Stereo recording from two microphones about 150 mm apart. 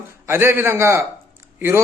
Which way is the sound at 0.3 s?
15° right (ahead or behind).